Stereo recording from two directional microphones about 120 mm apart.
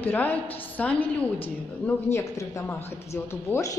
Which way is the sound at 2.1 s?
25° left (ahead or behind).